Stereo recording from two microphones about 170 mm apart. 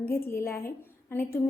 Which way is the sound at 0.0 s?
15° left (ahead or behind).